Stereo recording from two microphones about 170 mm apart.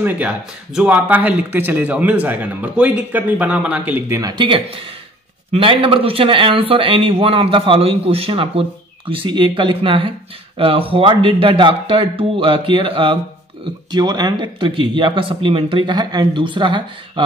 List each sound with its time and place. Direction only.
0.0 s a man's voice: 10° right (ahead or behind)
4.2 s speech: 25° right (ahead or behind)